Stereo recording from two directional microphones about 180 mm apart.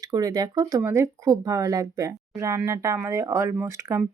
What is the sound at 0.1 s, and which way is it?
Speech, 20° right (ahead or behind).